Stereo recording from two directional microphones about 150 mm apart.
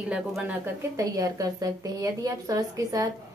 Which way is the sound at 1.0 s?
25° right (ahead or behind).